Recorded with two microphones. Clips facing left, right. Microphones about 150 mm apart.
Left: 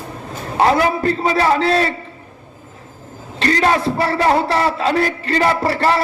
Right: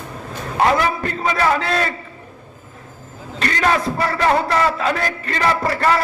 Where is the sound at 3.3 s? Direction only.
30° left (ahead or behind).